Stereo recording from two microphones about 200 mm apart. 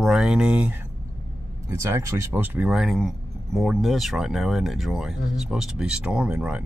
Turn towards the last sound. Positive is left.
turn(degrees=-5)  # may be behind; listen again after turning